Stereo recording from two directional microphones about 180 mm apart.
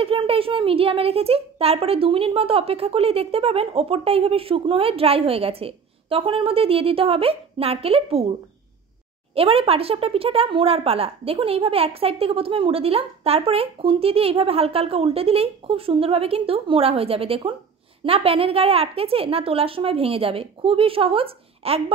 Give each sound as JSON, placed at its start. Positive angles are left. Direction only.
{"t": 0.0, "sound": "a woman's voice", "side_deg": -30}
{"t": 9.3, "sound": "a woman's voice", "side_deg": -30}